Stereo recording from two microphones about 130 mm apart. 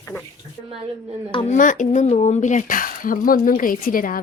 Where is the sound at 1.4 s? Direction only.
85° left.